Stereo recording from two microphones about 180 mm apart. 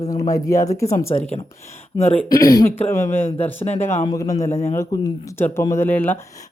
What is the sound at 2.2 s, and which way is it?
Speech, 20° left (ahead or behind).